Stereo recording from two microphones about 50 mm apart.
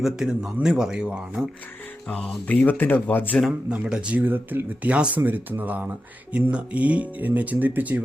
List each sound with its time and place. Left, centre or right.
0.0 s a man's voice: centre
2.0 s speech: left
3.7 s speech: centre
4.2 s speech: right
4.8 s speech: right
5.2 s speech: right